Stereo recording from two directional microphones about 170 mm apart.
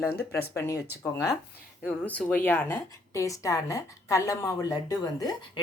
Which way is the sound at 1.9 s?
10° left (ahead or behind).